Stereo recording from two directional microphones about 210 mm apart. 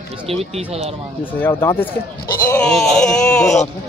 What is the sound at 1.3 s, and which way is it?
Speech, 10° left (ahead or behind).